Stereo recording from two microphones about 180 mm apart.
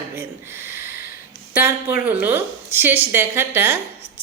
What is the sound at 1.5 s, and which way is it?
A woman's voice, 10° right (ahead or behind).